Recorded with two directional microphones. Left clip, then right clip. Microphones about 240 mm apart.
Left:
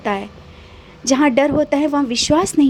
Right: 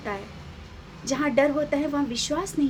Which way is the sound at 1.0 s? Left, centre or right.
Left.